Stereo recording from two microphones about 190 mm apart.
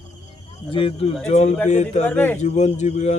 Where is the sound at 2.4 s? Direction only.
35° left (ahead or behind).